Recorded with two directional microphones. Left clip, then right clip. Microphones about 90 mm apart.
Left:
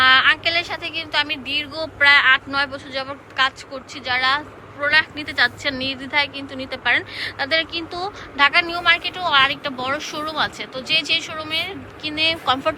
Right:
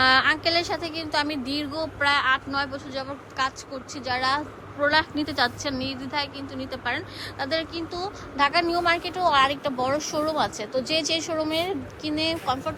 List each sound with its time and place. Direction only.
0.0 s a woman's voice: 60° right (ahead or behind)
1.7 s speech: 30° right (ahead or behind); by 5.5 s 50° right (ahead or behind)
5.6 s a woman's voice: 25° right (ahead or behind)
8.4 s a woman's voice: 45° right (ahead or behind)
10.2 s a woman's voice: 60° right (ahead or behind); by 11.8 s 80° right
12.0 s a woman's voice: 50° right (ahead or behind)